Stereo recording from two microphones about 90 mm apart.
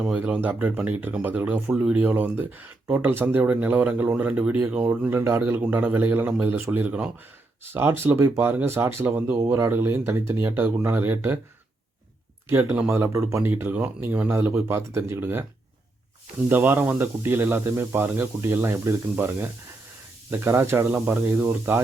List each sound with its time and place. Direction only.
0.0 s speech: 15° right (ahead or behind)
9.3 s speech: 35° right (ahead or behind)
12.5 s speech: 25° right (ahead or behind)
13.4 s speech: 20° right (ahead or behind)
16.5 s speech: 20° right (ahead or behind)